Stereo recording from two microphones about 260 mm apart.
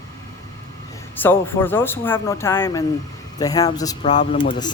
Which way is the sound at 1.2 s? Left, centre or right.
Centre.